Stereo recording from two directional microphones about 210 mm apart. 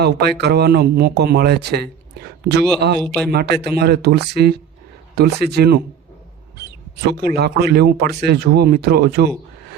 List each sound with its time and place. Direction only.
0.0 s speech: 50° right (ahead or behind)
3.0 s a man's voice: centre (ahead or behind)
3.3 s speech: 50° right (ahead or behind)